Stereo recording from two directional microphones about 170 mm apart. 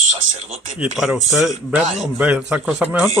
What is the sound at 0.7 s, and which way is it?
A man's voice, 5° right (ahead or behind).